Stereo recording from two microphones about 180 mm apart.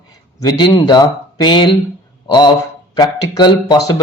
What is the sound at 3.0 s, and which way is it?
Speech, 20° left (ahead or behind).